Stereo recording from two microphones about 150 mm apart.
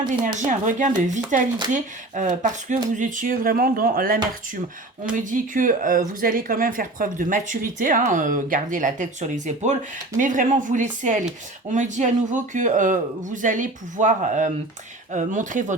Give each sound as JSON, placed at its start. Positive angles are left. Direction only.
{"t": 0.3, "sound": "speech", "side_deg": -55}
{"t": 5.1, "sound": "speech", "side_deg": -60}